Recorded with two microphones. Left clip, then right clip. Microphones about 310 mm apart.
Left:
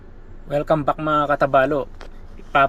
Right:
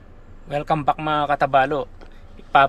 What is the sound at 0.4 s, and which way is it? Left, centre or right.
Speech, centre.